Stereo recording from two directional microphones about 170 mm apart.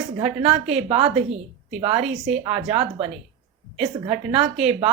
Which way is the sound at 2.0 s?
Centre (ahead or behind).